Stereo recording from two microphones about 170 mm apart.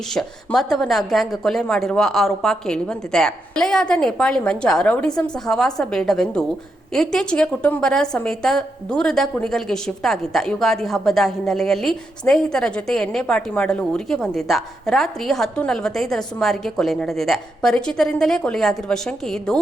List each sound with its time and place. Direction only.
0.1 s a woman's voice: centre (ahead or behind)